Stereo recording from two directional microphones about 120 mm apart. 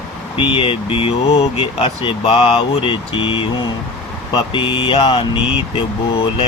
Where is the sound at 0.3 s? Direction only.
45° left (ahead or behind).